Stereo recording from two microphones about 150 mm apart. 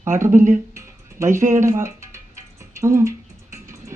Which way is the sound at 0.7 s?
20° right (ahead or behind).